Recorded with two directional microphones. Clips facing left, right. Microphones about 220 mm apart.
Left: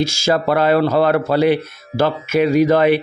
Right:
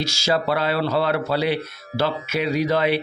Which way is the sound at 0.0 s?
50° left (ahead or behind).